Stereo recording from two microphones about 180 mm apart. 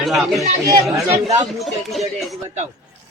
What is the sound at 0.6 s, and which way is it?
Speech, 20° right (ahead or behind).